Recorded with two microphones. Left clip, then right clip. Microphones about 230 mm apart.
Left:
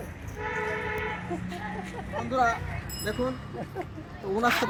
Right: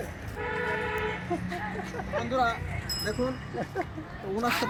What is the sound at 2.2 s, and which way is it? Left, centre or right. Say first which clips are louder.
Speech: left 2 dB; centre.